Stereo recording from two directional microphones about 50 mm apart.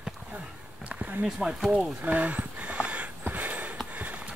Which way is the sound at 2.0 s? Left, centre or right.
Right.